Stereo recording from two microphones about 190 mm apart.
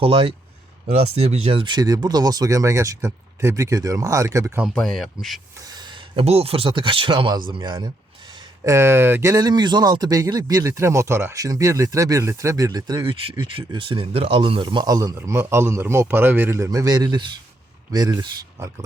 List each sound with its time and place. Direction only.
0.0 s speech: 30° right (ahead or behind)
4.7 s speech: centre (ahead or behind)
5.5 s speech: 20° right (ahead or behind)